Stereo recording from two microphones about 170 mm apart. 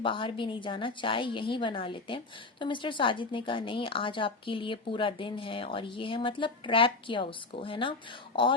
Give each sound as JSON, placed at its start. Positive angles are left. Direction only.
{"t": 0.0, "sound": "a woman's voice", "side_deg": 30}